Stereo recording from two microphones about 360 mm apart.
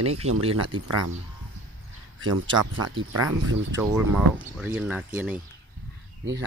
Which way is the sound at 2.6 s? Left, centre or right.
Right.